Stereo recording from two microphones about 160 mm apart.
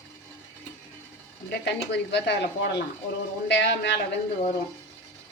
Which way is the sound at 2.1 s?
90° left.